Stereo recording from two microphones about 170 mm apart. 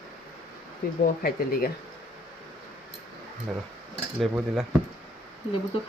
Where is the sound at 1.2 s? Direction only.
60° left (ahead or behind).